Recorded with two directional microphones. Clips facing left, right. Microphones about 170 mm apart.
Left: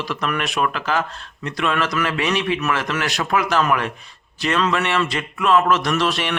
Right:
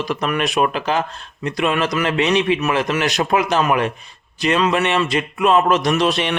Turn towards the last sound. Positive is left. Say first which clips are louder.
# right 3 dB
turn(degrees=-20)  # may be behind; listen again after turning